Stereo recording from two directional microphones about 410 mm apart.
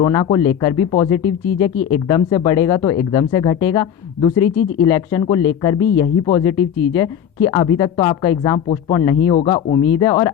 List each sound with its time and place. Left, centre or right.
0.0 s speech: centre